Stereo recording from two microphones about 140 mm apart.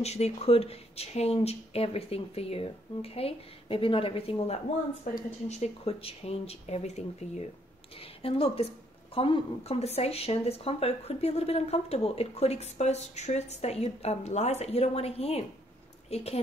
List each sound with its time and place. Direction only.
0.0 s speech: 50° left (ahead or behind)